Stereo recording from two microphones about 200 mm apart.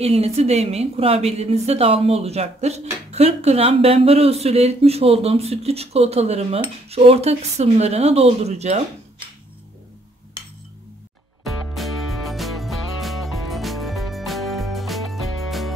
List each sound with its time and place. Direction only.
0.0 s a woman's voice: 30° right (ahead or behind)
11.7 s music: centre (ahead or behind)